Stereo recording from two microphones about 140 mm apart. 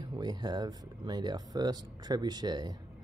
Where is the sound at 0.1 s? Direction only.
30° right (ahead or behind).